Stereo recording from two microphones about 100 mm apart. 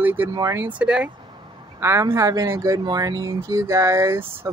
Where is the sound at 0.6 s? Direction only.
10° right (ahead or behind).